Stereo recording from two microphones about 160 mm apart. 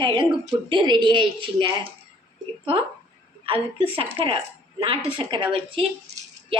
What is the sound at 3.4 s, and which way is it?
Speech, 35° right (ahead or behind).